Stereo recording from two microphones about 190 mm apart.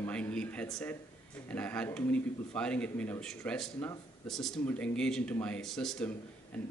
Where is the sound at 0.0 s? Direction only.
5° left (ahead or behind).